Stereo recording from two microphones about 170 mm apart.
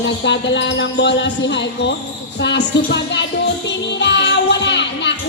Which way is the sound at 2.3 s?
90° left.